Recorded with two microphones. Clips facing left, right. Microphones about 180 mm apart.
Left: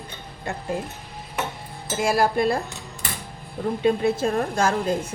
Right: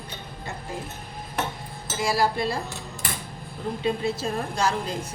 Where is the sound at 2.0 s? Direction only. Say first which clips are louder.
Left 3 dB; 50° left (ahead or behind).